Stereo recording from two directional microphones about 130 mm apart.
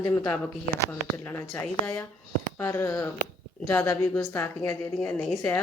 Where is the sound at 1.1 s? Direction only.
20° left (ahead or behind).